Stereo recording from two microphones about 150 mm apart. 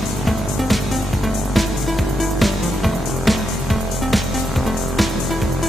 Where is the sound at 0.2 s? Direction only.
Centre (ahead or behind).